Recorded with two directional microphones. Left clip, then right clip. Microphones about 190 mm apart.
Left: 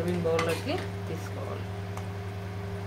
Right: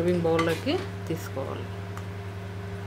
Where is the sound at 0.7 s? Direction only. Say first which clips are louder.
Right 4 dB; 55° right (ahead or behind).